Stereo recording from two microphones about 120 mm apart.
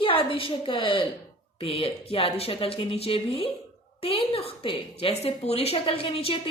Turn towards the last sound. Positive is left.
turn(degrees=55)  # may be behind; listen again after turning